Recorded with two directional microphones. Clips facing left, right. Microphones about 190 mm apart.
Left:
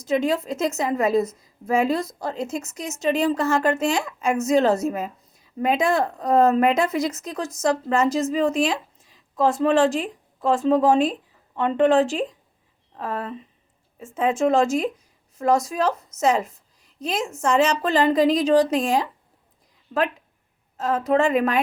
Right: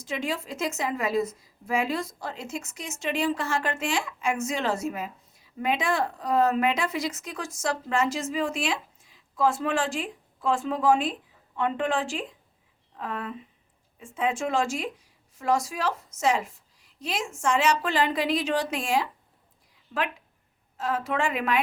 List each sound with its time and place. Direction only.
0.0 s speech: 40° left (ahead or behind)
20.7 s speech: 40° left (ahead or behind)